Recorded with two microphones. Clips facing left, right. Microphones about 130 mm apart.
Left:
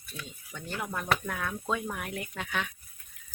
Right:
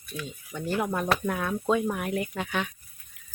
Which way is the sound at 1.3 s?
20° right (ahead or behind).